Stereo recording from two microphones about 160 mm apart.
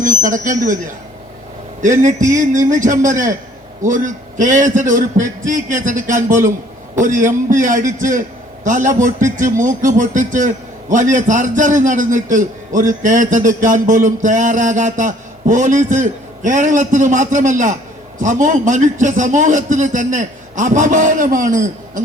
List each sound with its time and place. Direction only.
0.0 s a man's voice: 55° right (ahead or behind)
1.8 s a man's voice: 50° right (ahead or behind)